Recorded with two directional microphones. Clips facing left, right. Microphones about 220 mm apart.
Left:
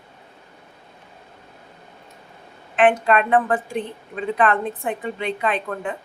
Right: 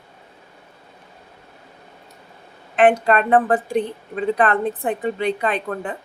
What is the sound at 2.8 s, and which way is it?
A woman's voice, 40° right (ahead or behind).